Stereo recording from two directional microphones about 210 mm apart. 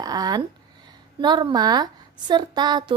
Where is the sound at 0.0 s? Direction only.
15° right (ahead or behind).